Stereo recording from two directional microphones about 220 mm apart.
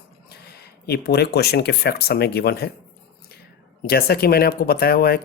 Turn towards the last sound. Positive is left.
turn(degrees=45)  # may be behind; listen again after turning